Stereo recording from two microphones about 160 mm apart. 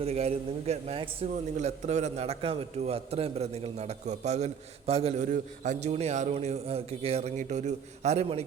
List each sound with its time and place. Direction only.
0.0 s a man's voice: 40° right (ahead or behind)